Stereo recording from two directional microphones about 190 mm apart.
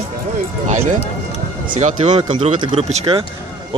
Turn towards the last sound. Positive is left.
turn(degrees=-35)  # may be behind; listen again after turning